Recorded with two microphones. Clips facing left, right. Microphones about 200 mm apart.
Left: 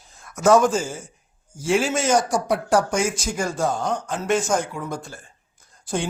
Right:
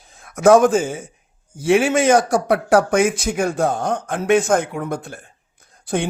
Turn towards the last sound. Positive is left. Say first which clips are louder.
# right 4 dB
turn(degrees=-60)  # may be behind; listen again after turning